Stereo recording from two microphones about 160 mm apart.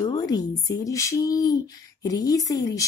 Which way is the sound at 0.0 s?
25° left (ahead or behind).